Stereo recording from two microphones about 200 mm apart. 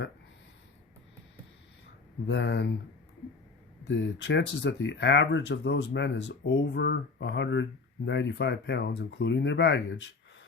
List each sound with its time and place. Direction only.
2.2 s speech: 65° left (ahead or behind)
3.8 s speech: 65° left (ahead or behind)